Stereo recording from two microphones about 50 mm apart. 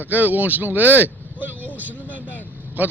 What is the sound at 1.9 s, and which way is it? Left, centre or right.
Speech, left.